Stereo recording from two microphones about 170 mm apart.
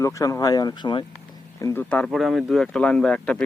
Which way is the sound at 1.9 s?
5° left (ahead or behind).